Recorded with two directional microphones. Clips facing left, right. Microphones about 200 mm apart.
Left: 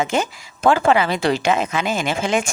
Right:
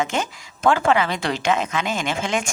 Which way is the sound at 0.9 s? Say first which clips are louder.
Left 3 dB; 5° left (ahead or behind).